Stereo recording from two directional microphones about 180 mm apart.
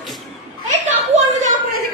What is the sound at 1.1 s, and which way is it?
Speech, 40° right (ahead or behind).